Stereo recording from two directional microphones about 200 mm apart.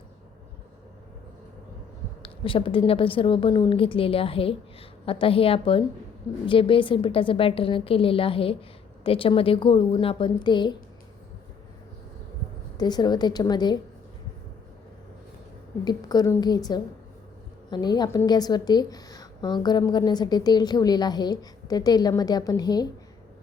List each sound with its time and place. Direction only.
2.2 s a woman's voice: 25° left (ahead or behind)
12.7 s a woman's voice: 20° left (ahead or behind)
15.8 s a woman's voice: 20° left (ahead or behind)